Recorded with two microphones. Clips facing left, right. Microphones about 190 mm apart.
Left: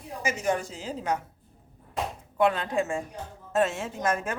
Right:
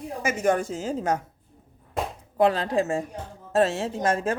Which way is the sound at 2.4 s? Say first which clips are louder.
Right 3 dB; 35° right (ahead or behind).